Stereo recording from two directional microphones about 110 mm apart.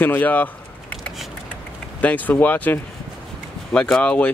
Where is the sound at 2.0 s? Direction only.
15° left (ahead or behind).